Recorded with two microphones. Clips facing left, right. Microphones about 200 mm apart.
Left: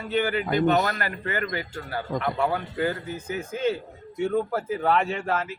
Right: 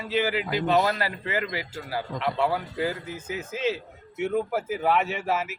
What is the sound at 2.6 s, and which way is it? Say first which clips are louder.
Speech: left 2 dB; 15° right (ahead or behind).